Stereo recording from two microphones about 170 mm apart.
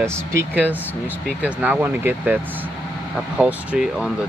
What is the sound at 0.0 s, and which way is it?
Speech, 15° right (ahead or behind).